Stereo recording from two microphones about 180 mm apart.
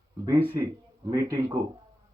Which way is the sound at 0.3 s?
30° right (ahead or behind).